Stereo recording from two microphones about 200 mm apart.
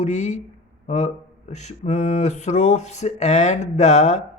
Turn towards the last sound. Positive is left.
turn(degrees=35)  # may be behind; listen again after turning